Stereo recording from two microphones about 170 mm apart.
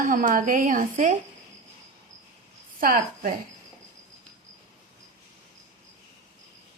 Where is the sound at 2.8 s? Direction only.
60° right (ahead or behind).